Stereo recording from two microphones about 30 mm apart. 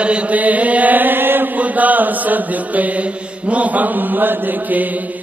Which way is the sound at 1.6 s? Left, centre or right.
Right.